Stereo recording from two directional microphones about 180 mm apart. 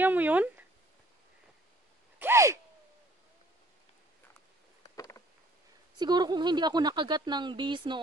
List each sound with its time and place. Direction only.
0.0 s speech: 10° right (ahead or behind)
2.1 s gasp: 15° right (ahead or behind)
4.9 s a sound: 20° left (ahead or behind)
5.9 s a woman's voice: 25° right (ahead or behind)